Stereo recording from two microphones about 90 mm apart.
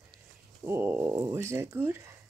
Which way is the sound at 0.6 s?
25° right (ahead or behind).